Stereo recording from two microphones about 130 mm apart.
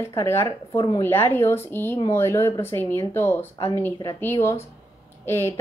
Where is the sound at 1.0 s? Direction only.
20° left (ahead or behind).